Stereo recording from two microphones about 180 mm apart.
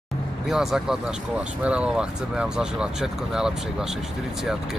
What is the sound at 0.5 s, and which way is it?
Speech, centre (ahead or behind).